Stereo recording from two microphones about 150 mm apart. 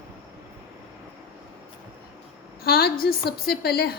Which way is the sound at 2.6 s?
90° left.